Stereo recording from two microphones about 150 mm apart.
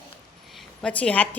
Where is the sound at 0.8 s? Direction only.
10° left (ahead or behind).